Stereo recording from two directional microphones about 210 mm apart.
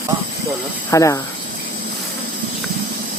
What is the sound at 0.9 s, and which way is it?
Speech, 15° left (ahead or behind).